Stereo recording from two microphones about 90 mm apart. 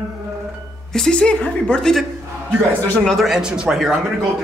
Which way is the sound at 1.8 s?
5° left (ahead or behind).